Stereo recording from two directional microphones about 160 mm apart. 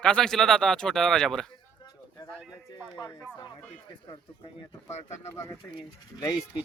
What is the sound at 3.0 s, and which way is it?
Speech, 25° left (ahead or behind).